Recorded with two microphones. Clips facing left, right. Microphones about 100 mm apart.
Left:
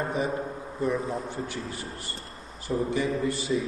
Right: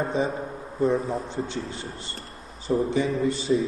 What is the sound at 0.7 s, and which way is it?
A man's voice, 20° right (ahead or behind).